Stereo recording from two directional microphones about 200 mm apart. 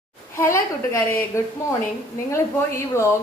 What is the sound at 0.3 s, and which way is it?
A woman's voice, 15° left (ahead or behind).